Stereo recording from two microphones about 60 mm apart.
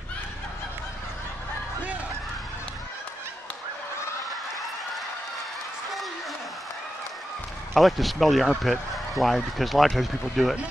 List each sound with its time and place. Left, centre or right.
7.7 s speech: centre